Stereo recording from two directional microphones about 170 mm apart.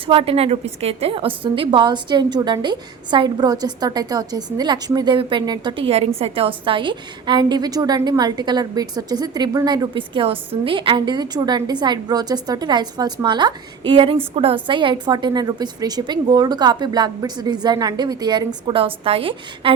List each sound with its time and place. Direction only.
0.1 s a woman's voice: 35° right (ahead or behind)